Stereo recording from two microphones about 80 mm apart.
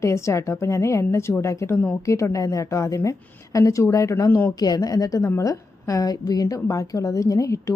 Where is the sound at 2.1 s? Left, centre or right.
Left.